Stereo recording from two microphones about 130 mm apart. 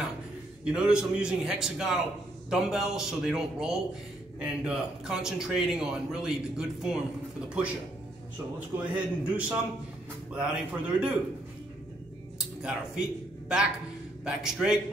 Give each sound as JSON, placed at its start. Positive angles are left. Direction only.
{"t": 0.7, "sound": "a man's voice", "side_deg": -5}
{"t": 8.7, "sound": "a man's voice", "side_deg": -10}
{"t": 12.4, "sound": "music", "side_deg": -5}
{"t": 14.2, "sound": "a man's voice", "side_deg": -5}